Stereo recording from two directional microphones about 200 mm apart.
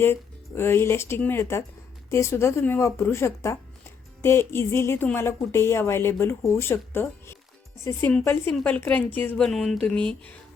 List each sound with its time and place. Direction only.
0.0 s a woman's voice: 10° left (ahead or behind)